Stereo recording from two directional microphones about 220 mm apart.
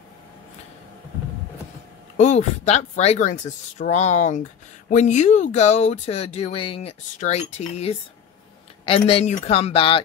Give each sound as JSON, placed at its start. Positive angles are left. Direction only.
{"t": 2.1, "sound": "speech", "side_deg": 30}